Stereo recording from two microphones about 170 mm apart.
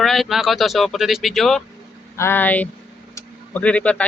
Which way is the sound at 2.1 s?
15° left (ahead or behind).